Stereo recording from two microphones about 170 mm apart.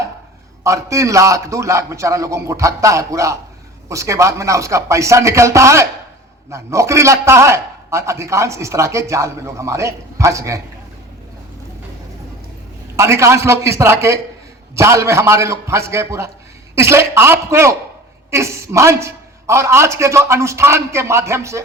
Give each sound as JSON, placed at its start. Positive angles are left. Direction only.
{"t": 0.6, "sound": "a man's voice", "side_deg": -20}
{"t": 13.0, "sound": "a man's voice", "side_deg": -15}